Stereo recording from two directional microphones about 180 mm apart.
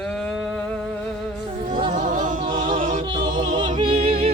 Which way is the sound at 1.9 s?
45° right (ahead or behind).